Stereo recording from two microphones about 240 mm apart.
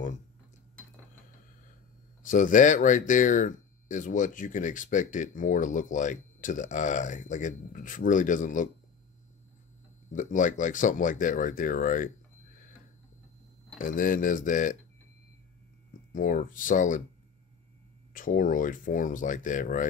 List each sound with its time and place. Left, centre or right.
2.2 s speech: left
10.1 s speech: left
13.7 s speech: left
16.1 s speech: left
18.1 s speech: left